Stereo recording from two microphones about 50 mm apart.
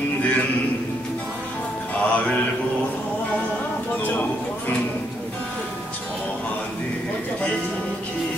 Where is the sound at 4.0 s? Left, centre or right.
Left.